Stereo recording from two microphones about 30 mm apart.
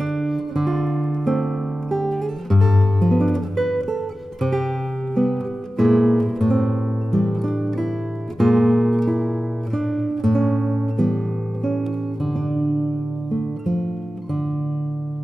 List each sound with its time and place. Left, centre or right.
0.1 s music: centre
1.2 s guitar: centre
7.1 s music: centre
12.3 s music: centre